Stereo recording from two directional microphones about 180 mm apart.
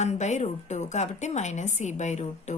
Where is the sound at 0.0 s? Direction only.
40° left (ahead or behind).